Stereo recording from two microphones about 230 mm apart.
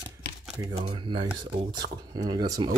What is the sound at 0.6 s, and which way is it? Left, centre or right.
Speech, right.